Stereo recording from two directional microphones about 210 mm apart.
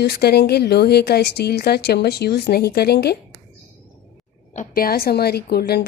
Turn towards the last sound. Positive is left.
turn(degrees=50)  # may be behind; listen again after turning